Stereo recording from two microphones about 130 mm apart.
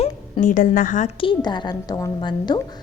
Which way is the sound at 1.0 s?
40° left (ahead or behind).